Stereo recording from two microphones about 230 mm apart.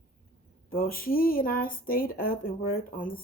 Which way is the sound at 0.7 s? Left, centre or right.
Left.